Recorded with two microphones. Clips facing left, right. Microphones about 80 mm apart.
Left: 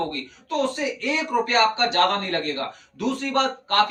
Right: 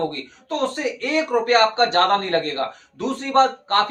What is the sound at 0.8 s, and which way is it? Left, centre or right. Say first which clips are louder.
A man's voice: right 3 dB; right.